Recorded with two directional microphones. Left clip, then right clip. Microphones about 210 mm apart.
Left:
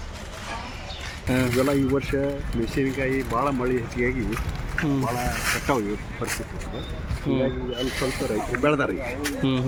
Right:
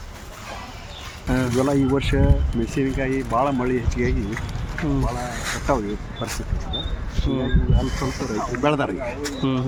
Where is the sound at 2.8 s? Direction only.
35° right (ahead or behind).